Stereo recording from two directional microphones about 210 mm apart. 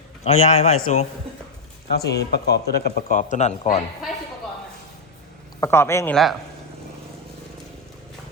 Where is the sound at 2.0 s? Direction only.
50° left (ahead or behind); by 3.7 s 35° left (ahead or behind).